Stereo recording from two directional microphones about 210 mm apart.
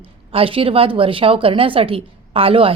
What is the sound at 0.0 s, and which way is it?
A woman's voice, 25° right (ahead or behind).